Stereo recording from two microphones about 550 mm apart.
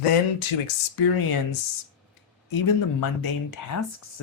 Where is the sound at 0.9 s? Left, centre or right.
Left.